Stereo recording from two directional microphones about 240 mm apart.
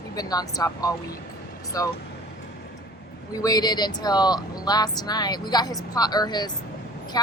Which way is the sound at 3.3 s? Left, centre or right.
Centre.